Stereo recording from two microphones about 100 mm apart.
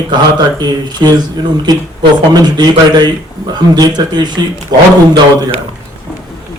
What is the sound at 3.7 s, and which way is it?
Speech, 45° right (ahead or behind).